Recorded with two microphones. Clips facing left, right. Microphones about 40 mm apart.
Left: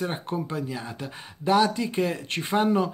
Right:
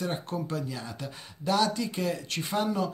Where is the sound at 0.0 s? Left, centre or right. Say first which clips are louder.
Left 3 dB; left.